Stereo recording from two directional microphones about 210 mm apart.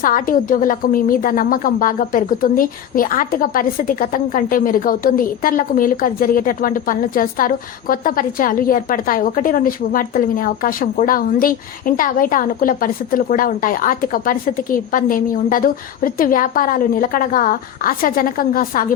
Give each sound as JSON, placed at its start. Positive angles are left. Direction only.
{"t": 0.0, "sound": "a woman's voice", "side_deg": 40}